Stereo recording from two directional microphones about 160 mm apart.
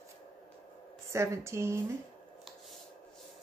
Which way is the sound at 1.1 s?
15° right (ahead or behind).